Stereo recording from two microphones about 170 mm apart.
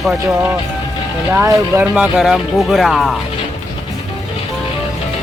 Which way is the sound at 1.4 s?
15° right (ahead or behind).